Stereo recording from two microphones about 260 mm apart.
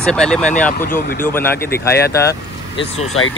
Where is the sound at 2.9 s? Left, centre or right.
Left.